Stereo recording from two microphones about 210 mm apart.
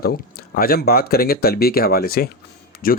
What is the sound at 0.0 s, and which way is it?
Speech, 45° left (ahead or behind).